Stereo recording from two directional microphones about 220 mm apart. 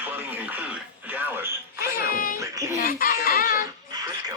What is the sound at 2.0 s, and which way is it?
Speech, 40° left (ahead or behind).